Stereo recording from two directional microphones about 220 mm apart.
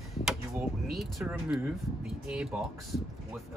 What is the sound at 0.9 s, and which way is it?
Speech, centre (ahead or behind).